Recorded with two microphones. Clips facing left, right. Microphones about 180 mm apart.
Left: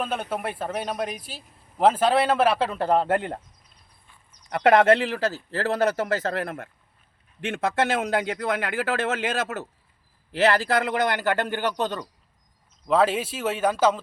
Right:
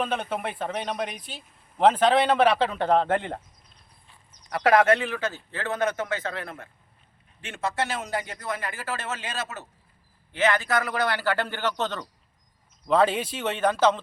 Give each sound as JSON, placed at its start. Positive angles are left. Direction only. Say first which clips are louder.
{"t": 0.0, "sound": "speech", "louder": "even", "side_deg": 5}
{"t": 4.4, "sound": "a man's voice", "louder": "left 2 dB", "side_deg": 25}
{"t": 10.3, "sound": "a man's voice", "louder": "left 3 dB", "side_deg": 35}